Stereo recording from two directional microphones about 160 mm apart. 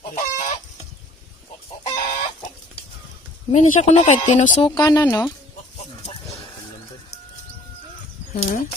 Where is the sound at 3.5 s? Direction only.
45° left (ahead or behind).